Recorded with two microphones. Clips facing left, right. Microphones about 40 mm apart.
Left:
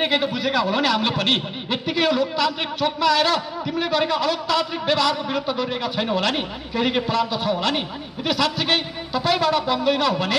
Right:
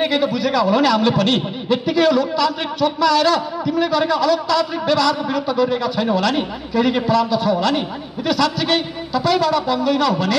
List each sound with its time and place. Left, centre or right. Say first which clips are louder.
0.0 s a man's voice: right 3 dB; left